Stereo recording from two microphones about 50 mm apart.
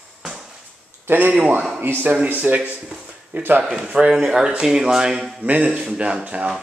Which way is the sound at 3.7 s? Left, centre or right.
Centre.